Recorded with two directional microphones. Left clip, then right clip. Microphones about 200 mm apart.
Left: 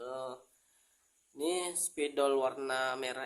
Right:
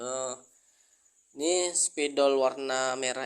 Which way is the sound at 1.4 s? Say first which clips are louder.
Right 7 dB; 25° right (ahead or behind).